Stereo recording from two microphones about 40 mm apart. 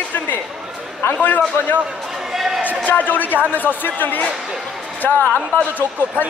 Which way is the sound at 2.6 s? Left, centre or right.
Left.